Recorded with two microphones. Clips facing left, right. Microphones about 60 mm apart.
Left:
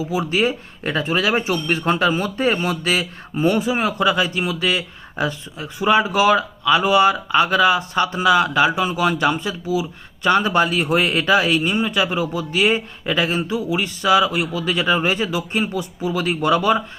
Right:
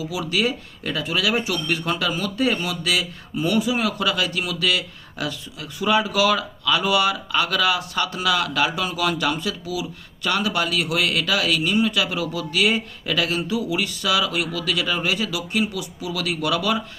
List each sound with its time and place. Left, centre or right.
0.0 s speech: left